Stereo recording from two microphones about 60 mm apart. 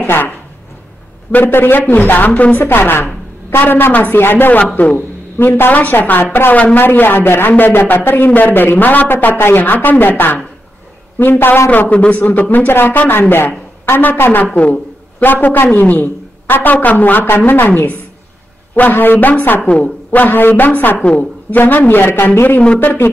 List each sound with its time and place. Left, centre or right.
0.0 s speech: left
1.3 s a man's voice: left
2.6 s a man's voice: left
11.9 s a man's voice: left
14.4 s a man's voice: left